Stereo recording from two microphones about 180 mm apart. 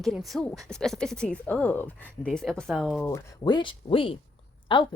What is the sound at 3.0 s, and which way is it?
Speech, 15° left (ahead or behind).